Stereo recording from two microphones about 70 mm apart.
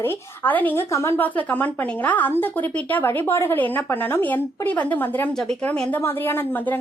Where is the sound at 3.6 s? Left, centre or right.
Left.